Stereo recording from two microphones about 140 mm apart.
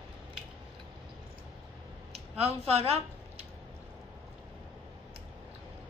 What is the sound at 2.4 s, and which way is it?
A woman's voice, 45° right (ahead or behind).